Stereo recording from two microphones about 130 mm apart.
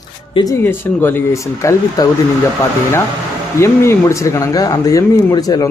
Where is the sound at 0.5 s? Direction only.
15° left (ahead or behind).